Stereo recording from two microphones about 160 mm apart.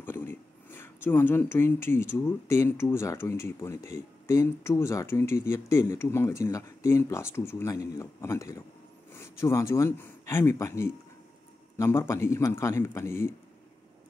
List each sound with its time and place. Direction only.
0.0 s speech: 15° left (ahead or behind)